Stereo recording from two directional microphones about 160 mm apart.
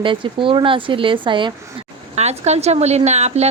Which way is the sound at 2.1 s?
45° right (ahead or behind).